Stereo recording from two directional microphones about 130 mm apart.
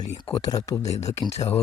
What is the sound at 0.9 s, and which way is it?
Speech, 60° left (ahead or behind).